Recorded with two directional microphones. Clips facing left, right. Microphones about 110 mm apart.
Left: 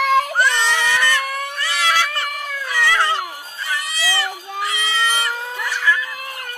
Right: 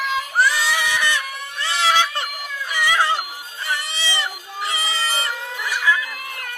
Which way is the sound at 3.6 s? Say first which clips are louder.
Left 2 dB; 30° right (ahead or behind).